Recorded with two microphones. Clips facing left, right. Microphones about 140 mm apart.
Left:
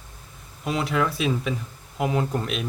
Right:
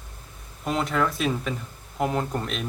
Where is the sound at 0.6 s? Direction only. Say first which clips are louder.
Even; 5° left (ahead or behind).